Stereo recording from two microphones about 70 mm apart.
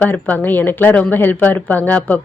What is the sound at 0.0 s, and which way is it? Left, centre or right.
Speech, left.